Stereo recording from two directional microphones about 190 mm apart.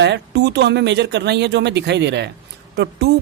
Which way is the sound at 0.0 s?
60° right (ahead or behind).